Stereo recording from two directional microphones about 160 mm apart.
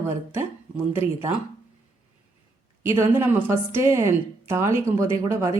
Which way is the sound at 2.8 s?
15° right (ahead or behind).